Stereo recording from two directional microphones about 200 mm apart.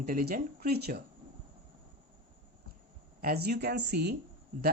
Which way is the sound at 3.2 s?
50° right (ahead or behind).